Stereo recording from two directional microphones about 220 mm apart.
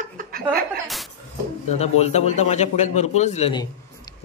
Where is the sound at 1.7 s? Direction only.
30° left (ahead or behind).